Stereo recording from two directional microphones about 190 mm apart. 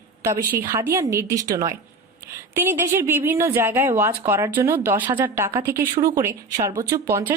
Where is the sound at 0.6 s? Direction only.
15° right (ahead or behind).